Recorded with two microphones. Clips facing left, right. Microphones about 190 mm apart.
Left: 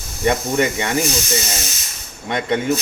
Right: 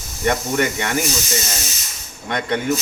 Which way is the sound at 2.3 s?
25° left (ahead or behind).